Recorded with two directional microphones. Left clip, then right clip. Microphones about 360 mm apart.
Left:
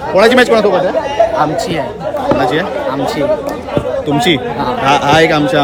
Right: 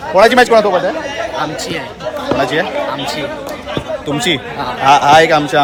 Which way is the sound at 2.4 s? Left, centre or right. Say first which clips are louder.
Right 2 dB; centre.